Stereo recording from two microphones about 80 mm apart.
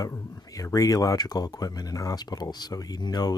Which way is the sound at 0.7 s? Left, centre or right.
Left.